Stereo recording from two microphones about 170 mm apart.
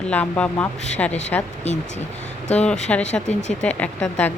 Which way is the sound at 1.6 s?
45° left (ahead or behind).